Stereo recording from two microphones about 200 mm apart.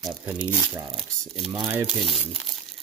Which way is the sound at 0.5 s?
10° right (ahead or behind).